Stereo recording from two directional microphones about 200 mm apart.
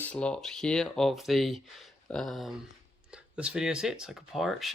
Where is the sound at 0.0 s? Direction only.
5° left (ahead or behind).